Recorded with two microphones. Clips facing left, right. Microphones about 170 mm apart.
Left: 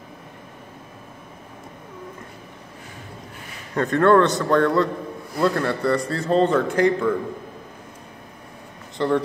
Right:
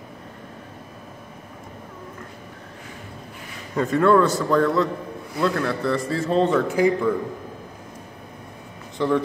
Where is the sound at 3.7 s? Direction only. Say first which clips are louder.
Left 1 dB; 5° right (ahead or behind).